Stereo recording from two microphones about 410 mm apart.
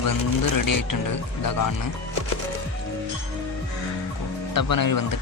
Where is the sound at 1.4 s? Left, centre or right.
Left.